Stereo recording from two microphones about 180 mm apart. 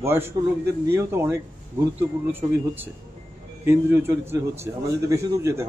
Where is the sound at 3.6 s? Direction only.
10° right (ahead or behind).